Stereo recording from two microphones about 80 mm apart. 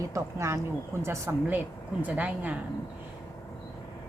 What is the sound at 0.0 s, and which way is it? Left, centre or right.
Speech, right.